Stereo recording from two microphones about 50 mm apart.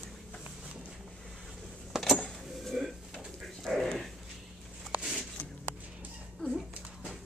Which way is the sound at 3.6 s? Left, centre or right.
Centre.